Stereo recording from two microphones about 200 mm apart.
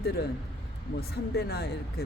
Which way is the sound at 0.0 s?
50° left (ahead or behind).